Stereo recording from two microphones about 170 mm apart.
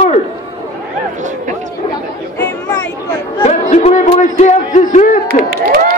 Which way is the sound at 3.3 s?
35° left (ahead or behind).